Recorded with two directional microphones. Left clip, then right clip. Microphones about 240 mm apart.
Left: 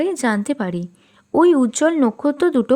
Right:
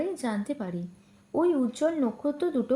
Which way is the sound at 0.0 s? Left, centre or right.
Left.